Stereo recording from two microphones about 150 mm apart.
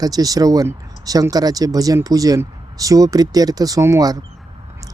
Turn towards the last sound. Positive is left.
turn(degrees=-20)  # may be behind; listen again after turning